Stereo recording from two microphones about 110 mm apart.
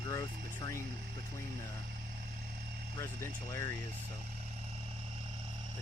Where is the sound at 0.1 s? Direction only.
30° left (ahead or behind).